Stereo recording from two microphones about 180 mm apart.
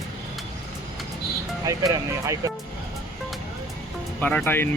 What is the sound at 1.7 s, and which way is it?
Speech, 20° right (ahead or behind).